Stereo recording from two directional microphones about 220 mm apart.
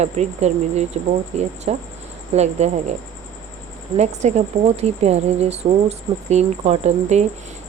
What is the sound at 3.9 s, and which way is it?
A woman's voice, 30° right (ahead or behind).